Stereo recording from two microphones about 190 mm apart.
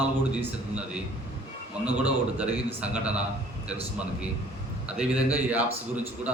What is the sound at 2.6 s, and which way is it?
Speech, 5° right (ahead or behind).